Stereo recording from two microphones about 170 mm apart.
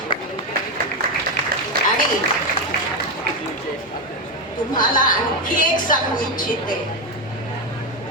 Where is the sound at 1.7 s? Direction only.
60° right (ahead or behind).